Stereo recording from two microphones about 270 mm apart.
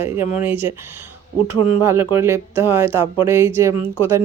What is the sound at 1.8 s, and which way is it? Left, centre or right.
A woman's voice, centre.